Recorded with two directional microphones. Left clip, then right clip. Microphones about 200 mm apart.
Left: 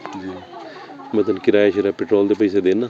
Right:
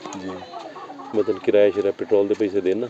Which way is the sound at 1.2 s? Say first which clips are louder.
Left 2 dB; 45° left (ahead or behind).